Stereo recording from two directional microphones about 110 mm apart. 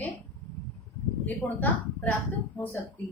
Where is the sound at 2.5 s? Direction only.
15° left (ahead or behind).